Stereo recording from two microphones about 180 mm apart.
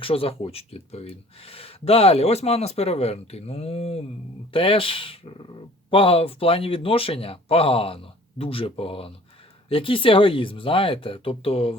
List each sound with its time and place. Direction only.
0.0 s speech: 30° left (ahead or behind)